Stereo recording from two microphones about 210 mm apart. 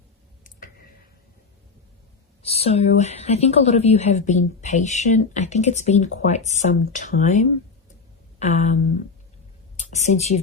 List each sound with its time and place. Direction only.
0.4 s a sound: 40° left (ahead or behind)
2.4 s a woman's voice: 30° left (ahead or behind)
10.0 s a woman's voice: 30° left (ahead or behind)